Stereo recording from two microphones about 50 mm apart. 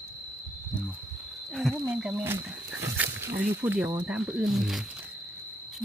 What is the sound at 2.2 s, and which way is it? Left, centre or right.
Speech, right.